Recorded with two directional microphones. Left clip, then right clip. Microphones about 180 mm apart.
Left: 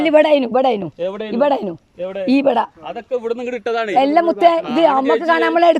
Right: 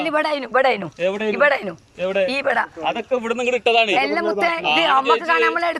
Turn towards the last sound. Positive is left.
turn(degrees=55)  # may be behind; listen again after turning